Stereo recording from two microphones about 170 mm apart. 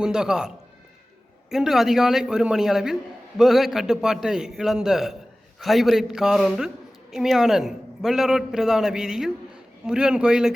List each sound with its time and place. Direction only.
0.0 s a man's voice: 5° right (ahead or behind)